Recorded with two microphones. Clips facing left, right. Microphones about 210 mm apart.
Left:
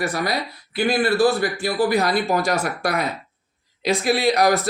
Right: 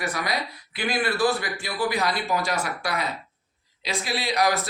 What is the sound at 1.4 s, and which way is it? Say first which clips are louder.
A man's voice: left 8 dB; 40° left (ahead or behind).